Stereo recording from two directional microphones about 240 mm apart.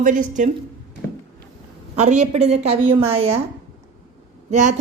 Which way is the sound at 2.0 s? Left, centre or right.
Right.